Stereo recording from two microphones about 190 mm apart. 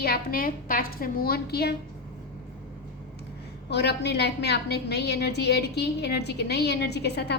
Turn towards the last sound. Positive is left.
turn(degrees=60)  # may be behind; listen again after turning